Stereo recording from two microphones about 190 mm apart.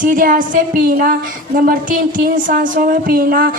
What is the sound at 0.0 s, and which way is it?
Speech, 45° right (ahead or behind).